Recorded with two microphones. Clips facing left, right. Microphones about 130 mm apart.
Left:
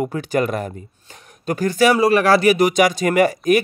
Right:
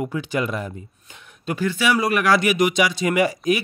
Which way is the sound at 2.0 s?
30° left (ahead or behind).